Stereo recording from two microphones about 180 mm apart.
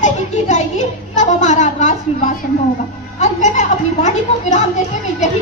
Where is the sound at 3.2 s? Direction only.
40° left (ahead or behind).